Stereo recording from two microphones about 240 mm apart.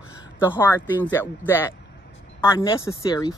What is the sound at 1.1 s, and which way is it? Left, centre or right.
Speech, centre.